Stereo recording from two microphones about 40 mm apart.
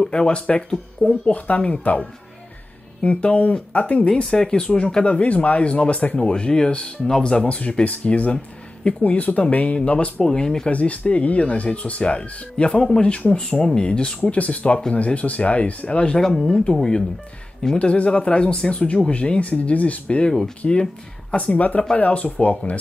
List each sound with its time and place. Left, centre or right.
0.1 s speech: left
1.9 s speech: left
4.3 s speech: left
4.6 s speech: left
7.4 s speech: left
10.2 s speech: centre
10.7 s speech: left
14.2 s speech: left
16.2 s speech: centre
17.7 s speech: left
20.2 s speech: centre
21.5 s speech: left